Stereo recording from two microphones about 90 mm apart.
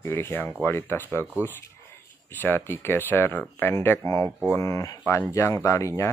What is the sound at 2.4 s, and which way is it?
Speech, 25° left (ahead or behind).